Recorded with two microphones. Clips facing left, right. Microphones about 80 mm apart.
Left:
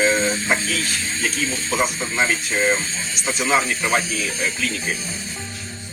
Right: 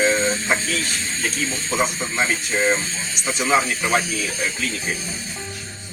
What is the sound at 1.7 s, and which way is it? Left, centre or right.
Speech, centre.